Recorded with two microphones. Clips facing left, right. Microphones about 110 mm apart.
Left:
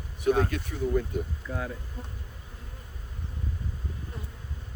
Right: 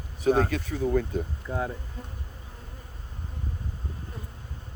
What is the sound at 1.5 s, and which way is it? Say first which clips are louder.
Speech: right 5 dB; 30° right (ahead or behind).